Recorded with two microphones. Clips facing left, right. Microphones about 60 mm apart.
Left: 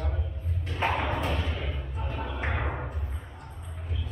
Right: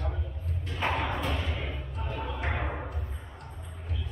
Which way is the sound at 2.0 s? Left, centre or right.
Centre.